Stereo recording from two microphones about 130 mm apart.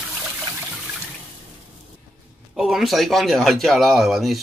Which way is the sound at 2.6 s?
5° right (ahead or behind).